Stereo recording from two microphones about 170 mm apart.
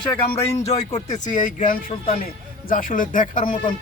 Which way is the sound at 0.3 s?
40° left (ahead or behind).